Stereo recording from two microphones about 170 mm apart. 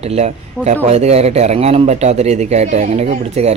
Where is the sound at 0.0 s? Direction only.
40° right (ahead or behind).